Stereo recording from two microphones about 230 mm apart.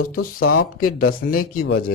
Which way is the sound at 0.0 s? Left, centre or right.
Left.